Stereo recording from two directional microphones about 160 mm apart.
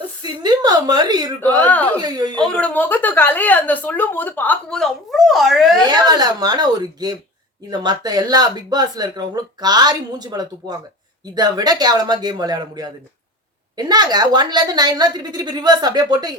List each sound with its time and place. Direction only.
0.2 s a sound: 25° right (ahead or behind)
1.4 s speech: 10° left (ahead or behind)
2.0 s speech: 25° right (ahead or behind)
2.4 s speech: 5° left (ahead or behind)
5.9 s speech: 25° right (ahead or behind)